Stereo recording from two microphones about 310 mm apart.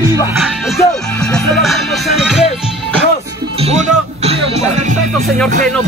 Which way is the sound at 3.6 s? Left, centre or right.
Right.